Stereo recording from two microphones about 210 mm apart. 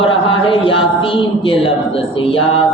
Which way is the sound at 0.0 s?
25° left (ahead or behind).